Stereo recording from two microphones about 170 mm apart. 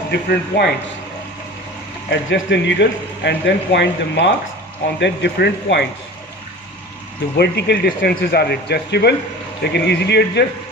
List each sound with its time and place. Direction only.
0.1 s speech: 75° left (ahead or behind)
2.0 s speech: 90° left
7.3 s speech: 75° left (ahead or behind)